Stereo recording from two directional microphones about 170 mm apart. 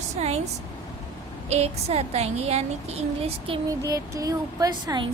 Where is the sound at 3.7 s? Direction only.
20° right (ahead or behind).